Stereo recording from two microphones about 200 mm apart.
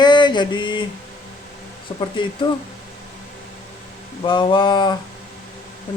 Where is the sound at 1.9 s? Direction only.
25° left (ahead or behind).